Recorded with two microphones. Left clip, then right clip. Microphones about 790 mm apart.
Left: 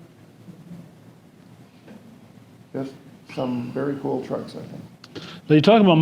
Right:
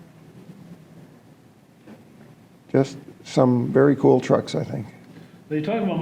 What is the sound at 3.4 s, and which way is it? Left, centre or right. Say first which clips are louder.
Speech: right 9 dB; right.